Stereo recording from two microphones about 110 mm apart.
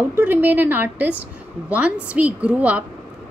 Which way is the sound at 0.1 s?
15° right (ahead or behind).